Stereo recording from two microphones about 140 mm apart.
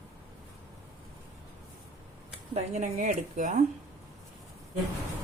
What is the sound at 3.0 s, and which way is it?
Speech, 60° right (ahead or behind).